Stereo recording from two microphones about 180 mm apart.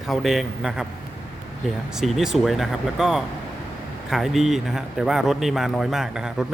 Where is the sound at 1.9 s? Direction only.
Centre (ahead or behind).